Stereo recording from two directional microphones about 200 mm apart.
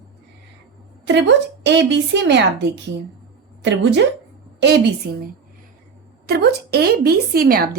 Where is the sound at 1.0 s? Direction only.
60° right (ahead or behind).